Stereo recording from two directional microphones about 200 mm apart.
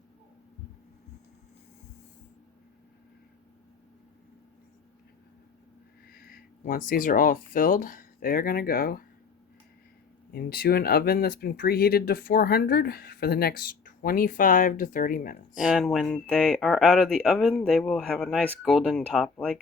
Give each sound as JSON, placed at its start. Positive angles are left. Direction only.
{"t": 6.1, "sound": "speech", "side_deg": 45}
{"t": 10.3, "sound": "speech", "side_deg": 50}
{"t": 15.5, "sound": "speech", "side_deg": -5}